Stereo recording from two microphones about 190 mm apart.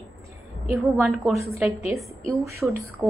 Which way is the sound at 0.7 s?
5° right (ahead or behind).